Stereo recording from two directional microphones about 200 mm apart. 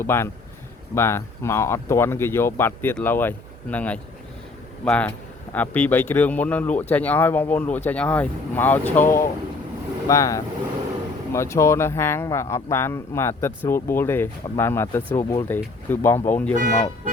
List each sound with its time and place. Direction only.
0.0 s speech: 10° left (ahead or behind)